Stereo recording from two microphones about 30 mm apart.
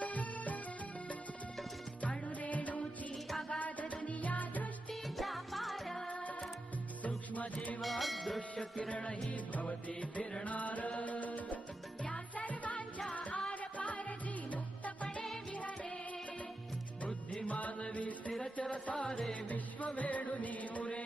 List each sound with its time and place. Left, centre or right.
0.0 s music: left
2.4 s music: left
5.0 s music: centre
7.0 s music: left
7.8 s music: centre
8.4 s music: left
17.5 s music: left